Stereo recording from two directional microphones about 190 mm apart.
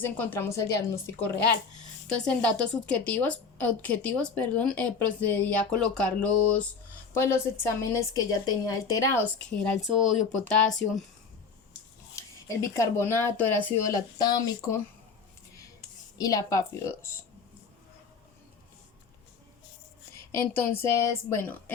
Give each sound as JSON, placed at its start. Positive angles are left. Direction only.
{"t": 0.0, "sound": "a woman's voice", "side_deg": 10}
{"t": 2.0, "sound": "a woman's voice", "side_deg": 5}
{"t": 9.4, "sound": "speech", "side_deg": 5}
{"t": 12.1, "sound": "a woman's voice", "side_deg": 15}
{"t": 16.1, "sound": "a woman's voice", "side_deg": 20}
{"t": 20.6, "sound": "a woman's voice", "side_deg": 15}